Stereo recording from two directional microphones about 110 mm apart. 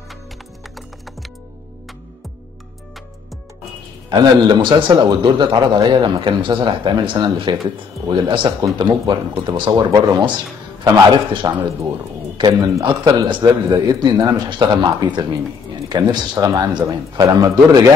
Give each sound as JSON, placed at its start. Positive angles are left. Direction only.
{"t": 4.1, "sound": "a man's voice", "side_deg": -40}